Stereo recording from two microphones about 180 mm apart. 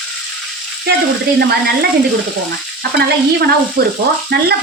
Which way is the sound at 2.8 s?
65° right (ahead or behind).